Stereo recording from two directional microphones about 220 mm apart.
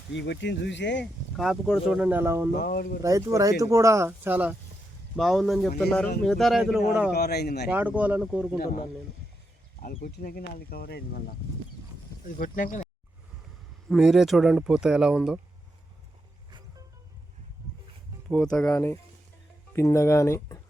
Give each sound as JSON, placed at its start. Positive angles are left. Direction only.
{"t": 0.1, "sound": "speech", "side_deg": 55}
{"t": 1.4, "sound": "speech", "side_deg": 0}
{"t": 2.6, "sound": "speech", "side_deg": 45}
{"t": 3.0, "sound": "speech", "side_deg": -15}
{"t": 7.1, "sound": "speech", "side_deg": 45}
{"t": 7.7, "sound": "speech", "side_deg": -5}
{"t": 9.8, "sound": "speech", "side_deg": 40}
{"t": 12.4, "sound": "speech", "side_deg": 40}
{"t": 13.9, "sound": "speech", "side_deg": 0}
{"t": 18.3, "sound": "speech", "side_deg": 5}